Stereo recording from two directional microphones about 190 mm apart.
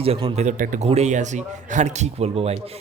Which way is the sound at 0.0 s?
30° right (ahead or behind).